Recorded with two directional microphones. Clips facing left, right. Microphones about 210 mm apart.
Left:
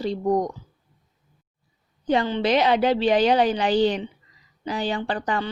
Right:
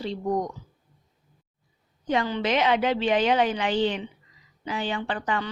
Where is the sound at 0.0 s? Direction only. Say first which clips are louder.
Left 5 dB; 40° left (ahead or behind).